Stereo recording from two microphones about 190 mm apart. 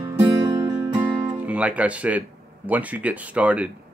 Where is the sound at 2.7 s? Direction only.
10° right (ahead or behind).